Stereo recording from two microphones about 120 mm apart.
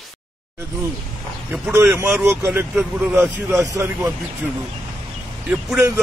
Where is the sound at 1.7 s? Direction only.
20° right (ahead or behind).